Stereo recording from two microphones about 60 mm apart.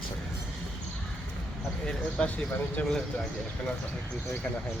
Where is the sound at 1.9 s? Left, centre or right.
Centre.